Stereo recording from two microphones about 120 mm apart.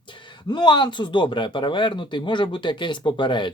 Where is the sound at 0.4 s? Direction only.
40° left (ahead or behind).